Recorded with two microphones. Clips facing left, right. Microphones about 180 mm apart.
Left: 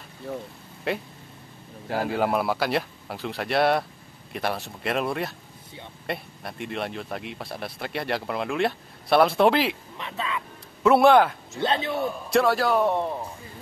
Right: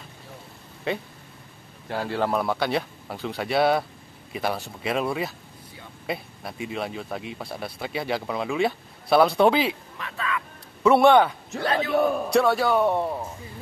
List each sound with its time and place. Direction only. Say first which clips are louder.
0.9 s speech: even; 5° left (ahead or behind)
9.9 s speech: right 1 dB; 20° left (ahead or behind)
10.8 s speech: even; centre (ahead or behind)
11.6 s speech: even; 25° left (ahead or behind)
12.3 s speech: right 1 dB; centre (ahead or behind)